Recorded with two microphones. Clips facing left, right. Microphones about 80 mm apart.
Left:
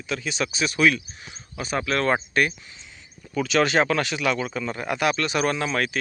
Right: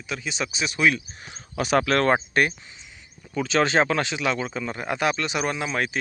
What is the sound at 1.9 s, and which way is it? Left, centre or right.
Speech, right.